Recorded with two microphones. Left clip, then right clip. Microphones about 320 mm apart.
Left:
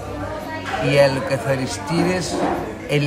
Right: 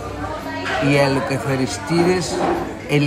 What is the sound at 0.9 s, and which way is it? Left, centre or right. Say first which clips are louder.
A man's voice: left 3 dB; centre.